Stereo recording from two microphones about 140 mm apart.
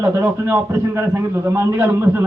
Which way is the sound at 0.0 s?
15° right (ahead or behind).